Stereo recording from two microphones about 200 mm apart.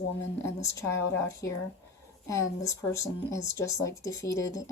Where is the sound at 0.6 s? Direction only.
15° left (ahead or behind).